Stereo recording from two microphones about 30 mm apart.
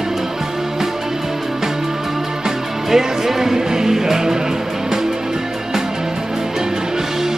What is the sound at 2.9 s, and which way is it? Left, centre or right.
Music, centre.